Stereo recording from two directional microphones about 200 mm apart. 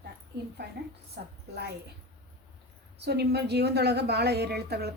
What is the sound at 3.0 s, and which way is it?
A woman's voice, 55° right (ahead or behind).